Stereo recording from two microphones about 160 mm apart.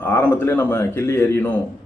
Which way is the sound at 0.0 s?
15° left (ahead or behind).